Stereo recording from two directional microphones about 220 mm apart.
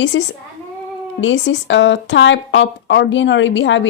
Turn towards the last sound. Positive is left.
turn(degrees=55)  # may be behind; listen again after turning